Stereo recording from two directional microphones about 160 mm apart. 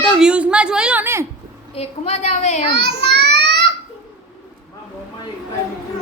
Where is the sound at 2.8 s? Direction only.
90° right.